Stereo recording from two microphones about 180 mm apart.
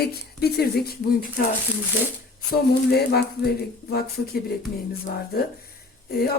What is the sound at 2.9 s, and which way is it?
Speech, 60° left (ahead or behind).